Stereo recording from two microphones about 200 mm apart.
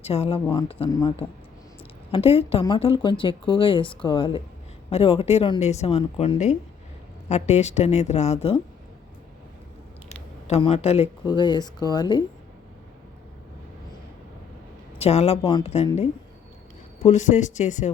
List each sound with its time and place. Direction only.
0.0 s speech: 30° left (ahead or behind)
2.1 s speech: 30° left (ahead or behind)
10.1 s speech: 30° left (ahead or behind)
14.9 s a woman's voice: 30° left (ahead or behind)
17.0 s speech: 35° left (ahead or behind)